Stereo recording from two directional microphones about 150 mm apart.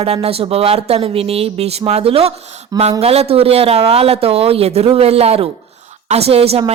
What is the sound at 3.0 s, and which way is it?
A woman's voice, 40° right (ahead or behind).